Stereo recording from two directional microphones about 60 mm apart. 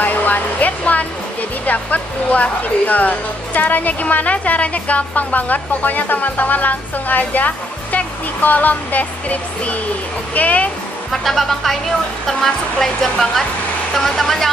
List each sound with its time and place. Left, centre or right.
0.0 s hair dryer: left
1.7 s speech: left
11.1 s speech: centre